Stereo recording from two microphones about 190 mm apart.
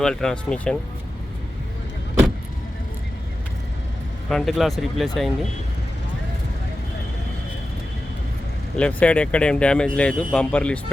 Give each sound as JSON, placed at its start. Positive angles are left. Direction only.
{"t": 0.0, "sound": "speech", "side_deg": 5}
{"t": 4.3, "sound": "speech", "side_deg": 0}
{"t": 8.7, "sound": "speech", "side_deg": 5}